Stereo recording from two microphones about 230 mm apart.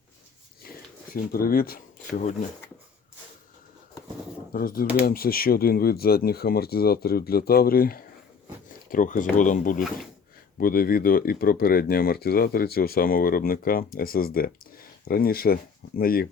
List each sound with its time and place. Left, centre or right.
0.6 s a sound: left
1.1 s speech: left
4.5 s speech: left